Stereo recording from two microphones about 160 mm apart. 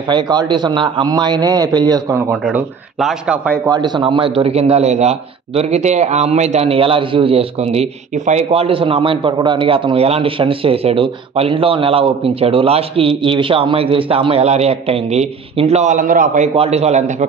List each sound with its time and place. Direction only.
0.1 s a man's voice: 25° right (ahead or behind)
2.4 s speech: centre (ahead or behind)
3.6 s a man's voice: 25° right (ahead or behind); by 16.4 s 55° right (ahead or behind)
16.5 s a man's voice: 40° right (ahead or behind)